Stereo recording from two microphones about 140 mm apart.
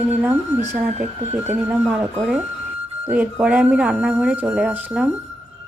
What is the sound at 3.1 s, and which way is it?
Speech, 10° right (ahead or behind).